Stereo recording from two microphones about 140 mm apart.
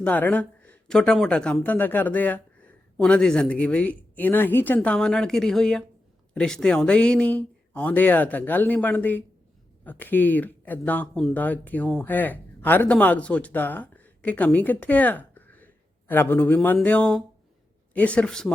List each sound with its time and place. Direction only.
0.0 s a man's voice: 10° left (ahead or behind)